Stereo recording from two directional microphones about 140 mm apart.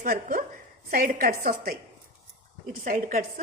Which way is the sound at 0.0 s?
85° right.